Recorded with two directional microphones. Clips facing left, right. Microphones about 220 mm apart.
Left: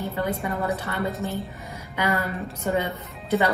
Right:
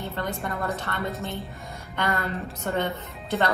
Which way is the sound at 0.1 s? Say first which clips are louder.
Left 4 dB; 10° left (ahead or behind).